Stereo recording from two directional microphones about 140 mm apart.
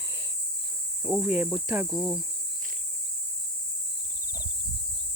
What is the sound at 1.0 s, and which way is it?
Speech, 5° right (ahead or behind).